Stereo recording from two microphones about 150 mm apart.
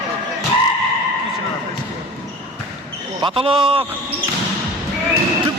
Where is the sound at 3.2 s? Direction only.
40° right (ahead or behind).